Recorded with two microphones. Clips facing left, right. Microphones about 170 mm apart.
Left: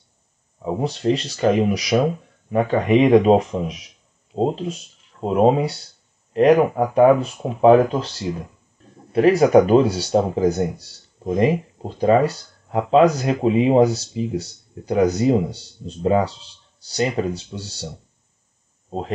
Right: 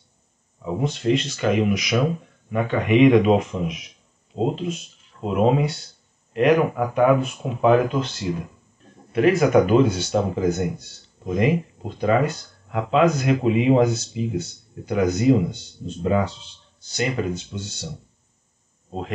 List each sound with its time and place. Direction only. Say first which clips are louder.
0.6 s speech: left 2 dB; 35° left (ahead or behind)
18.9 s speech: left 4 dB; 35° left (ahead or behind)